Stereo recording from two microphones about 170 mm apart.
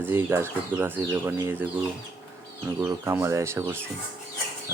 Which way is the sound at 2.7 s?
15° right (ahead or behind).